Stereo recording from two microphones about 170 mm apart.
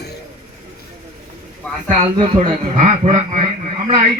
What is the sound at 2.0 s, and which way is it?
Speech, 35° right (ahead or behind).